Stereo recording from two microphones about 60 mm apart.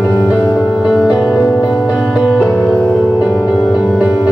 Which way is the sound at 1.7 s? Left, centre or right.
Centre.